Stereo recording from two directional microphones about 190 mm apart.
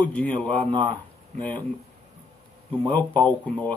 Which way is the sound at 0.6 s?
25° right (ahead or behind).